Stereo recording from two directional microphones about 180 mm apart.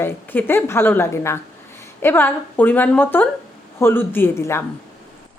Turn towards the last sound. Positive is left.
turn(degrees=15)  # may be behind; listen again after turning